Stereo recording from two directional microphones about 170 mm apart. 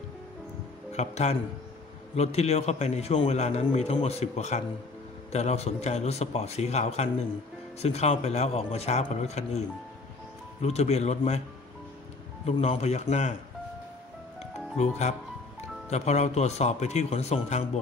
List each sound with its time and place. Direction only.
0.9 s a man's voice: 40° left (ahead or behind)
10.6 s a man's voice: 40° left (ahead or behind)
12.4 s a man's voice: 40° left (ahead or behind)
14.8 s a man's voice: 40° left (ahead or behind)